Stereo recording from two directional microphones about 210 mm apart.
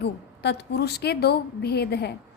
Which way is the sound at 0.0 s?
55° left (ahead or behind).